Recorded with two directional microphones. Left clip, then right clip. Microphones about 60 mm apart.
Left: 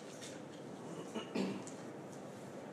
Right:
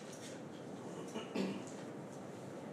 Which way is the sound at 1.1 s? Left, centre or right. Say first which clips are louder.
Left 1 dB; centre.